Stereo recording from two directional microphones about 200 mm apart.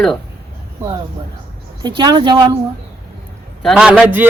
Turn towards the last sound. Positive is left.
turn(degrees=-5)  # may be behind; listen again after turning